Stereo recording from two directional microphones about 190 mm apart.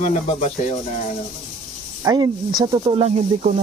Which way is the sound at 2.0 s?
20° right (ahead or behind).